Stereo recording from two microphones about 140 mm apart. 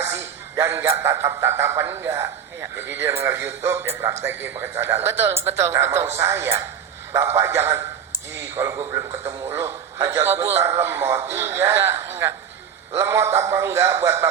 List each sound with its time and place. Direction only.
0.0 s a man's voice: 20° right (ahead or behind)